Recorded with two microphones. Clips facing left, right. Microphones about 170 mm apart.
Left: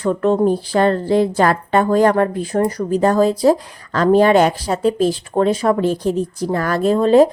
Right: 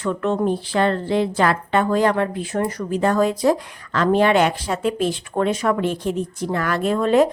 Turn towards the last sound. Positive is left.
turn(degrees=30)  # may be behind; listen again after turning